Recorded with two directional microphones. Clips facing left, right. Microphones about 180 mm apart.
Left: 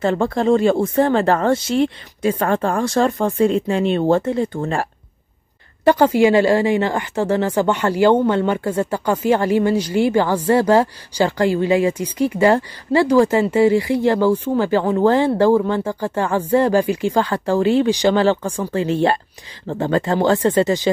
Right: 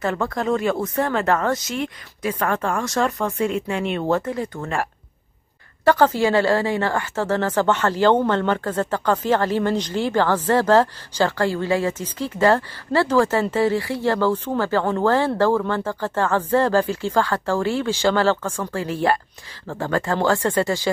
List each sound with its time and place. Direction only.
0.0 s speech: 30° left (ahead or behind)
5.9 s a woman's voice: 15° left (ahead or behind)